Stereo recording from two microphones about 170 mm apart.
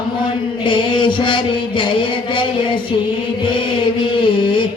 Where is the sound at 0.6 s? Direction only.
30° left (ahead or behind).